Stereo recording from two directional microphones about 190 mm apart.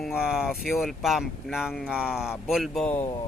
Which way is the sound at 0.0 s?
5° right (ahead or behind).